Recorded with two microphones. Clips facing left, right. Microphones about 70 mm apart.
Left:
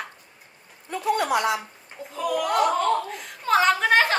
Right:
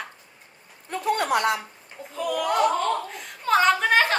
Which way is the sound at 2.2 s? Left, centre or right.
Centre.